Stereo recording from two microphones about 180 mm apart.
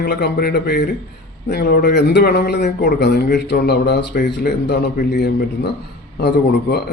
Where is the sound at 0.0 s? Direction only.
60° left (ahead or behind).